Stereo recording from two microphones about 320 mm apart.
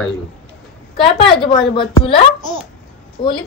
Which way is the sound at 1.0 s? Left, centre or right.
Centre.